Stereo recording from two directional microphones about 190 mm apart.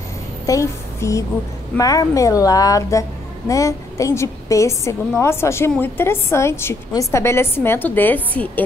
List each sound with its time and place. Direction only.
0.5 s a woman's voice: 15° left (ahead or behind)